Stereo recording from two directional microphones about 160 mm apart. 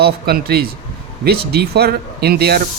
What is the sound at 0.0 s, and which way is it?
Speech, 75° right (ahead or behind).